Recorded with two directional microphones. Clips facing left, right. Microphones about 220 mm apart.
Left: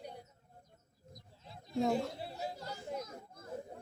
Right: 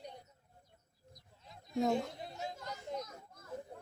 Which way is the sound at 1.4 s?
30° left (ahead or behind).